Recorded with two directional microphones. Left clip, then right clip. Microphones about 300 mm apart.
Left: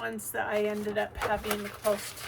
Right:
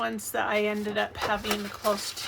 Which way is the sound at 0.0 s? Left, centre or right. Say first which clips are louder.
Right 4 dB; centre.